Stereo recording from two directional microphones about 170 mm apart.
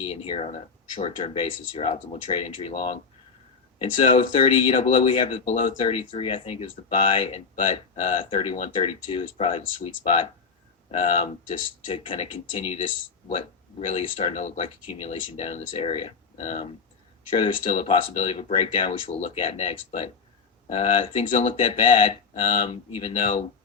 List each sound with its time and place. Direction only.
0.0 s speech: 35° left (ahead or behind)
11.9 s speech: 40° left (ahead or behind)